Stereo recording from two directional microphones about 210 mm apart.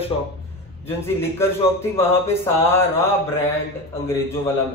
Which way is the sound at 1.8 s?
10° left (ahead or behind).